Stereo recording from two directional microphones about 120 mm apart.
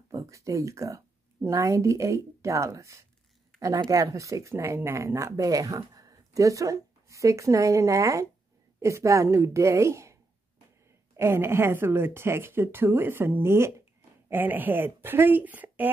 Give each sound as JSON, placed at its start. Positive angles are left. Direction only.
{"t": 0.1, "sound": "speech", "side_deg": -25}
{"t": 11.1, "sound": "a woman's voice", "side_deg": -20}